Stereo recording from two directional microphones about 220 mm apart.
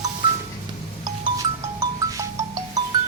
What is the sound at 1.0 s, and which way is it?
Music, 15° right (ahead or behind).